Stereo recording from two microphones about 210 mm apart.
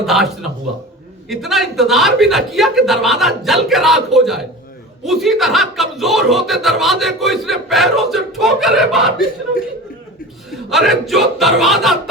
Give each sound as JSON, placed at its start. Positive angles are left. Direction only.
{"t": 0.0, "sound": "speech", "side_deg": 0}
{"t": 1.3, "sound": "speech", "side_deg": 0}
{"t": 9.1, "sound": "speech", "side_deg": 45}
{"t": 10.5, "sound": "speech", "side_deg": 0}